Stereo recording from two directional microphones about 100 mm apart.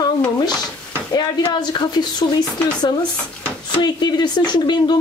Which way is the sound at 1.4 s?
50° left (ahead or behind).